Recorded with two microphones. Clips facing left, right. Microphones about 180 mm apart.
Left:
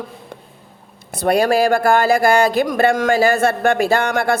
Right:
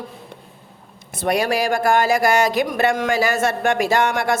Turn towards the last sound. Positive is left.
turn(degrees=35)  # may be behind; listen again after turning